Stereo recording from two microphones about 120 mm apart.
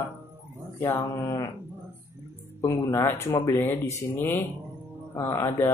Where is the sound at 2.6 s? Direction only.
25° left (ahead or behind).